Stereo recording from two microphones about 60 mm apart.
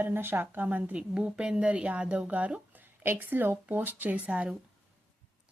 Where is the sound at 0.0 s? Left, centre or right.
Right.